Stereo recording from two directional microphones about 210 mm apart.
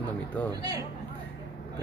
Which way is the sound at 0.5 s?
20° right (ahead or behind).